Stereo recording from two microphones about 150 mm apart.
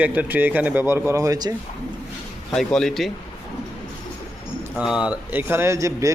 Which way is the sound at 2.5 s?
Centre (ahead or behind).